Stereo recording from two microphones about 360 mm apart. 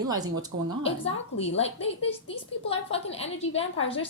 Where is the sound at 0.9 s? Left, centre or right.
Centre.